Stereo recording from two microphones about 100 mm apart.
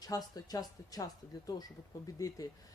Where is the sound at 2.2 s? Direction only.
35° left (ahead or behind).